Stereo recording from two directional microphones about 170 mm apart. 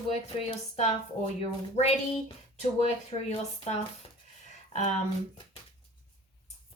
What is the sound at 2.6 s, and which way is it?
A woman's voice, 40° left (ahead or behind).